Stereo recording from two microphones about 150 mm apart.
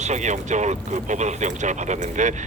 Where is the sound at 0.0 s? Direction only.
50° right (ahead or behind).